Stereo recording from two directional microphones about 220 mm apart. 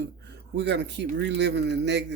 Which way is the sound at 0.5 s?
50° right (ahead or behind).